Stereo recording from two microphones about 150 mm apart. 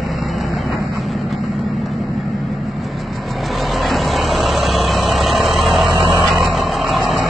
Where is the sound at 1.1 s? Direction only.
Centre (ahead or behind).